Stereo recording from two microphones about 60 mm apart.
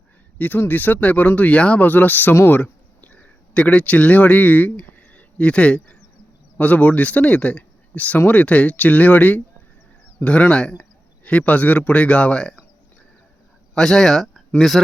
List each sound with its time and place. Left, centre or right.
0.3 s speech: left
13.7 s speech: centre